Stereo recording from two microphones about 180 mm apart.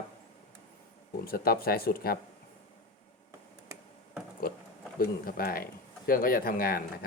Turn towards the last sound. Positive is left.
turn(degrees=55)  # may be behind; listen again after turning